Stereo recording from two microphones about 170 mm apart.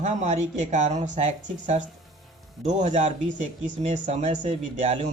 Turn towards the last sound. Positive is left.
turn(degrees=-40)  # may be behind; listen again after turning